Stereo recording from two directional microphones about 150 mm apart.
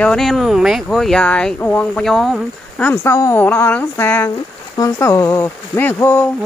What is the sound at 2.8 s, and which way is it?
Speech, 15° left (ahead or behind).